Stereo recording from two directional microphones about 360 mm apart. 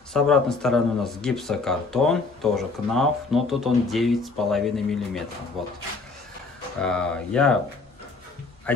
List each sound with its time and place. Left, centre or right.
0.1 s speech: centre
6.8 s speech: centre
8.7 s speech: centre